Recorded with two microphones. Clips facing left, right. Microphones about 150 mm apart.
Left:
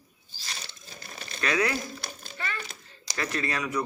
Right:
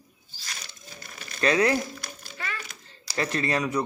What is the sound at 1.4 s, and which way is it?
Speech, 30° right (ahead or behind).